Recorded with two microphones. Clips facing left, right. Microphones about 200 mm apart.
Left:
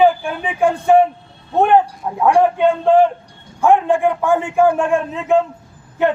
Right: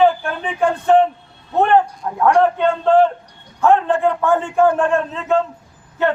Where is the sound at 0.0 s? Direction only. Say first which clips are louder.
Left 1 dB; 10° left (ahead or behind).